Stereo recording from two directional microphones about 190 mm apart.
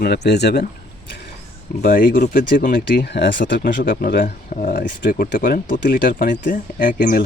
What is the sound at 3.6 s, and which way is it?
Speech, 50° left (ahead or behind).